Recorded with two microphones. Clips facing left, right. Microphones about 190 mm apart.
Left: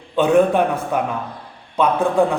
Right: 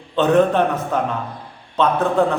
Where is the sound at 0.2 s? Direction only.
10° left (ahead or behind).